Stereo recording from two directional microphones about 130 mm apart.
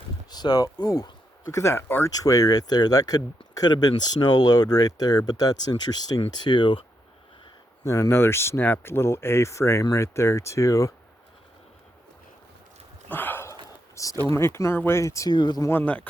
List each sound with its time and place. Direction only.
0.3 s speech: 30° left (ahead or behind)
7.9 s speech: 25° left (ahead or behind)
13.1 s a sound: 15° left (ahead or behind)
13.9 s speech: 25° left (ahead or behind)
15.7 s a man's voice: 10° left (ahead or behind)